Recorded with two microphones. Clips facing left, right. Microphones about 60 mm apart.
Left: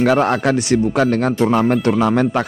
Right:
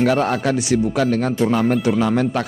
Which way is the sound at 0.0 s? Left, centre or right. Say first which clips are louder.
Left 3 dB; left.